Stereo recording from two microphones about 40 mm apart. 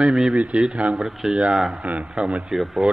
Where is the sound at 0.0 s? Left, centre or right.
Centre.